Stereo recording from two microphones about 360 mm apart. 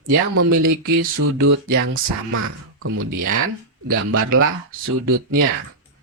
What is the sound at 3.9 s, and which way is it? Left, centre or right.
Speech, right.